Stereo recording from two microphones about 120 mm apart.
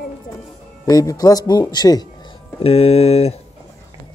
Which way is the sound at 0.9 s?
30° left (ahead or behind).